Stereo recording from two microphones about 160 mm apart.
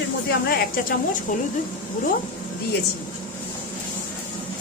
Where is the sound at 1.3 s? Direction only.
60° left (ahead or behind).